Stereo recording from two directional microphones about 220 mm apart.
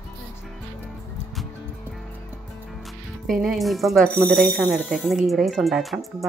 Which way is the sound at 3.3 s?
Centre (ahead or behind).